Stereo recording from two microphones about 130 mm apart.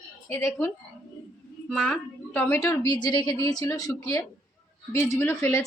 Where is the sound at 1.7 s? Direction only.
5° left (ahead or behind).